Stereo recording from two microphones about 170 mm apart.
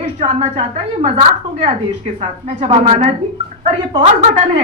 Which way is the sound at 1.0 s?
35° right (ahead or behind).